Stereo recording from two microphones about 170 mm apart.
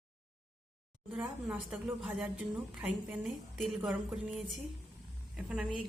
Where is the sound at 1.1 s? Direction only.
10° right (ahead or behind).